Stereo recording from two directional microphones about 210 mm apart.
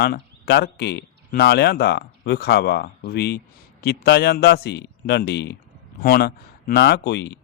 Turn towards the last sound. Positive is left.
turn(degrees=50)  # may be behind; listen again after turning